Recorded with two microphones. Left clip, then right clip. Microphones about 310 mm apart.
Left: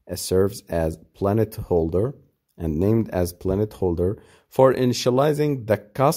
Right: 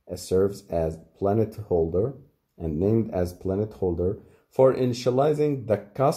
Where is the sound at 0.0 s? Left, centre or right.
Left.